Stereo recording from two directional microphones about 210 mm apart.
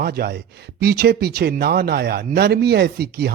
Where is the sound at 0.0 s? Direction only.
45° right (ahead or behind).